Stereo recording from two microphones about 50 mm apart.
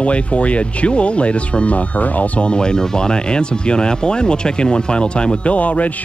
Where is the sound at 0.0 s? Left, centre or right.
Left.